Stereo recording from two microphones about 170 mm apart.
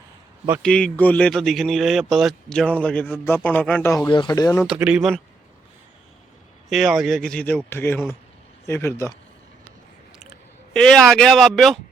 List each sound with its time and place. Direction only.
0.6 s speech: 5° left (ahead or behind); by 4.6 s 20° left (ahead or behind)
4.6 s speech: 5° right (ahead or behind)
6.7 s speech: centre (ahead or behind); by 9.1 s 15° left (ahead or behind)
10.8 s speech: 5° left (ahead or behind)